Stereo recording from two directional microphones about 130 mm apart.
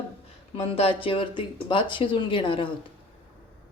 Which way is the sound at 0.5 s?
50° left (ahead or behind).